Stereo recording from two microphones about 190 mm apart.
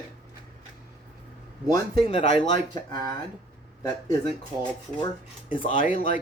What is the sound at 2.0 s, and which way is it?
Speech, 35° left (ahead or behind).